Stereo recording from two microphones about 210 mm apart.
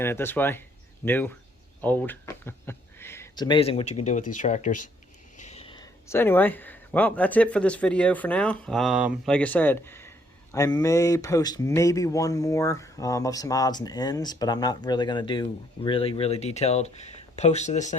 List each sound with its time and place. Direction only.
0.0 s speech: 10° left (ahead or behind); by 17.9 s 35° left (ahead or behind)